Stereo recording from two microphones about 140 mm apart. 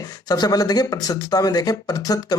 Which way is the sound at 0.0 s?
25° left (ahead or behind).